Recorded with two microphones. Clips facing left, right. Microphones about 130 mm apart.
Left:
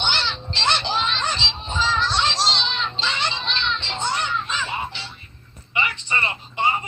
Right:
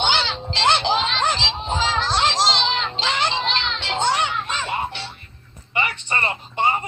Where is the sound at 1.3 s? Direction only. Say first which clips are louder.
Right 5 dB; 90° right; by 5.0 s 55° right (ahead or behind).